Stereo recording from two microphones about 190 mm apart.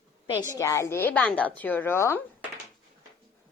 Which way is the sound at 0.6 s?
15° left (ahead or behind).